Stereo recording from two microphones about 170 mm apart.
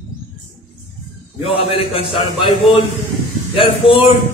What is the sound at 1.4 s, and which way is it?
A man's voice, 35° left (ahead or behind).